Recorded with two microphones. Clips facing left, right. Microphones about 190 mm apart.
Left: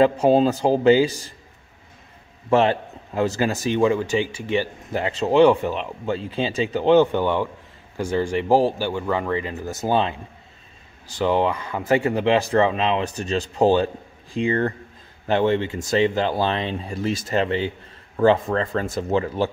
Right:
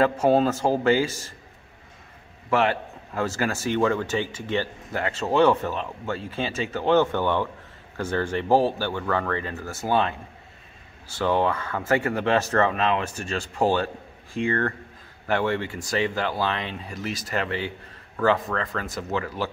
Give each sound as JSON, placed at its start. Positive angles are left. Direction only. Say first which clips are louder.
{"t": 0.0, "sound": "a man's voice", "louder": "left 3 dB", "side_deg": 15}
{"t": 2.5, "sound": "a man's voice", "louder": "left 4 dB", "side_deg": 25}